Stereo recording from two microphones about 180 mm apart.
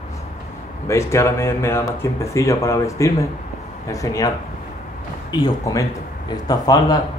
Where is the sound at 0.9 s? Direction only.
15° left (ahead or behind).